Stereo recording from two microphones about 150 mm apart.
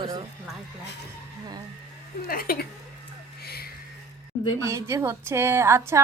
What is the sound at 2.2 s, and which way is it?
Speech, 85° left.